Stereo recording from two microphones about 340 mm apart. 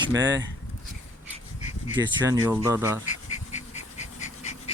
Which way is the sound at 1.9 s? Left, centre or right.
Centre.